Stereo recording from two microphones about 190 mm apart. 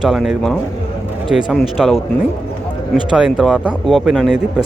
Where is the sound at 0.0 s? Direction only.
Centre (ahead or behind).